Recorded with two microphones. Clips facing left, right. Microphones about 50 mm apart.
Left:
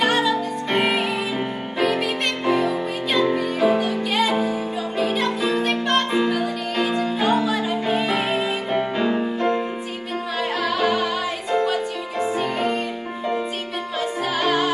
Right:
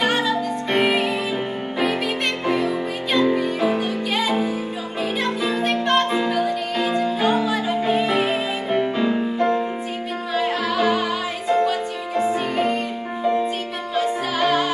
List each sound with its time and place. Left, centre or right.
0.0 s music: centre
2.4 s music: centre
10.3 s music: centre
11.5 s music: left
12.2 s music: centre
13.9 s music: centre